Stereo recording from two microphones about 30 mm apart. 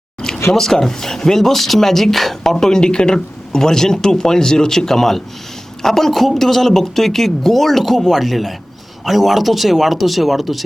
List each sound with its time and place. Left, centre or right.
0.2 s speech: centre
3.6 s speech: centre